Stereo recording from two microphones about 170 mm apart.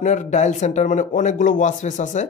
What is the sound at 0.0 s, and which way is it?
A man's voice, 45° left (ahead or behind).